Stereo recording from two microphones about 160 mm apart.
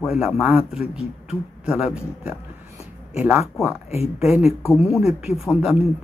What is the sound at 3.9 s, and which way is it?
Speech, 40° left (ahead or behind).